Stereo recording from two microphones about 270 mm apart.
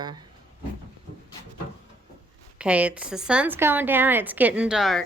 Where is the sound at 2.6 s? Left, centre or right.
Centre.